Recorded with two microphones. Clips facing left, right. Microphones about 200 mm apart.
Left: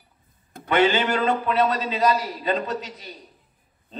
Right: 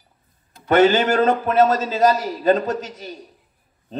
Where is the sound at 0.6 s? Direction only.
45° right (ahead or behind).